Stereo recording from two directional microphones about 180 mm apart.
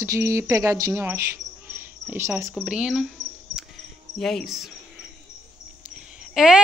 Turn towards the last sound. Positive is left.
turn(degrees=-5)  # may be behind; listen again after turning